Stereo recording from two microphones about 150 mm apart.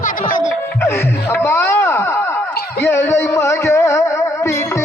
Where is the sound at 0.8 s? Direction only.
15° left (ahead or behind).